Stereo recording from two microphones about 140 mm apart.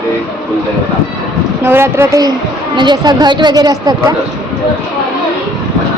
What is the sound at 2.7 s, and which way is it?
A woman's voice, 30° right (ahead or behind).